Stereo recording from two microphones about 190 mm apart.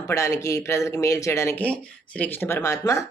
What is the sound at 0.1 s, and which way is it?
Speech, 15° left (ahead or behind).